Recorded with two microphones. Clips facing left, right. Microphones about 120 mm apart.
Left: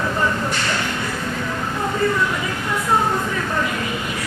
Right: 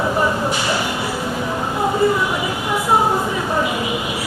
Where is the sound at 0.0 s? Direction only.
20° right (ahead or behind).